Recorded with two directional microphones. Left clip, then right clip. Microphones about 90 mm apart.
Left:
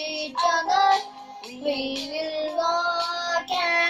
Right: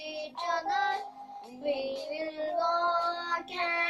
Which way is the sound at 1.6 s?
40° right (ahead or behind).